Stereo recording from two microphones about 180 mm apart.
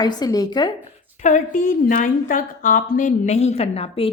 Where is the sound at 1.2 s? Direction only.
45° left (ahead or behind).